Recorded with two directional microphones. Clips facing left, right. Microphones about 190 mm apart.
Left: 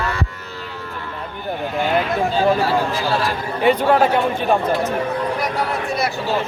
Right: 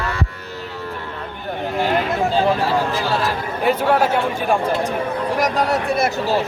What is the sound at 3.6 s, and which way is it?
Speech, centre (ahead or behind).